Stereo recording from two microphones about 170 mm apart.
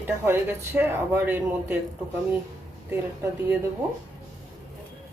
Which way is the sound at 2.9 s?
15° right (ahead or behind).